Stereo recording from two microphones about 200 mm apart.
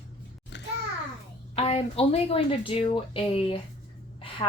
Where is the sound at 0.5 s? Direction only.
60° left (ahead or behind).